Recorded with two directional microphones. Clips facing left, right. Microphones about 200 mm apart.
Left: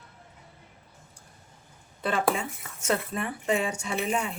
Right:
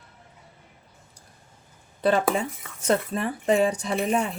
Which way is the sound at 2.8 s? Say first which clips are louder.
Right 5 dB; 35° right (ahead or behind).